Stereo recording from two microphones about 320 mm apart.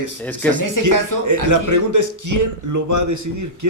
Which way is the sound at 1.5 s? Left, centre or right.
Right.